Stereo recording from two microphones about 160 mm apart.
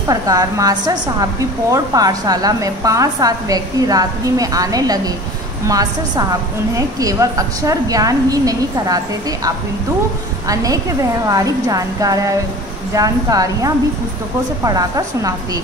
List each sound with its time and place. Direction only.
0.1 s a woman's voice: 20° right (ahead or behind)
10.5 s a woman's voice: 20° right (ahead or behind)